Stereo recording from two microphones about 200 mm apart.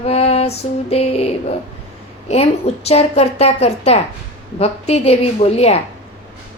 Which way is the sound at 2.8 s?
30° left (ahead or behind).